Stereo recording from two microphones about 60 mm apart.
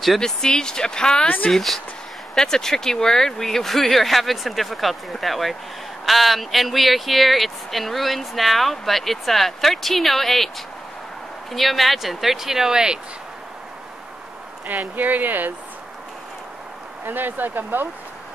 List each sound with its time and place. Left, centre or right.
0.2 s speech: centre
1.5 s speech: centre
11.5 s speech: centre
14.7 s speech: right
17.0 s speech: right